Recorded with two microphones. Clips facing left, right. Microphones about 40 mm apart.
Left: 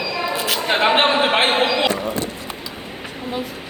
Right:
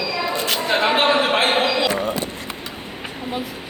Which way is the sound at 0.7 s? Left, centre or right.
Left.